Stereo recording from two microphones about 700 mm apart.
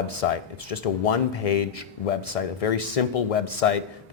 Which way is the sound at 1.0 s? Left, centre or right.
Left.